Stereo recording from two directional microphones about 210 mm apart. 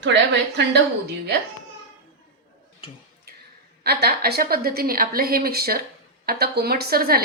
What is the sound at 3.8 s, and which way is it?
Speech, 50° right (ahead or behind).